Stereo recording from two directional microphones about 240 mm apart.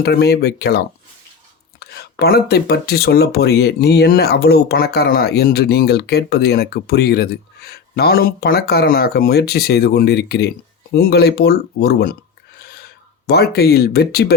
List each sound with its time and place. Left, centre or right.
0.0 s speech: left